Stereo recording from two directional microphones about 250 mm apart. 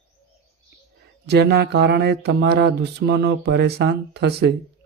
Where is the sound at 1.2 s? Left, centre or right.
Right.